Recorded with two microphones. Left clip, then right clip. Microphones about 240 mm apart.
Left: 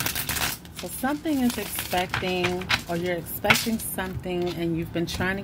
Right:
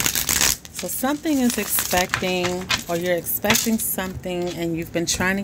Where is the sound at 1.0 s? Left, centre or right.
Right.